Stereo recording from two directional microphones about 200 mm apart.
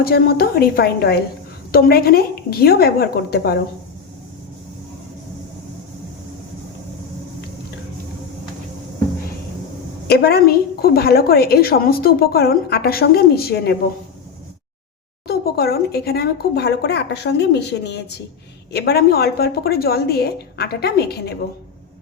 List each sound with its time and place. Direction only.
0.0 s a woman's voice: 50° left (ahead or behind)
10.1 s a woman's voice: 50° left (ahead or behind)
15.3 s a woman's voice: 50° left (ahead or behind)